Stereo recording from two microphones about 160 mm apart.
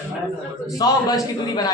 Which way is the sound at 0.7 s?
25° left (ahead or behind).